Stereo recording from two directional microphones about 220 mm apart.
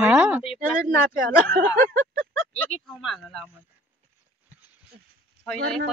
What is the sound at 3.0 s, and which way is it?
Speech, centre (ahead or behind).